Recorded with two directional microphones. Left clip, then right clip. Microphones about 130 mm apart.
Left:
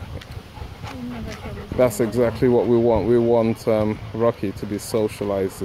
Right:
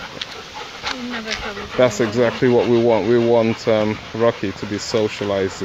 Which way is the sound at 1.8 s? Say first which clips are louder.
Right 2 dB; 15° left (ahead or behind).